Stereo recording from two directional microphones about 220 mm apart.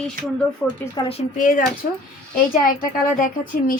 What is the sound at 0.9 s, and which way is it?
Speech, 25° left (ahead or behind).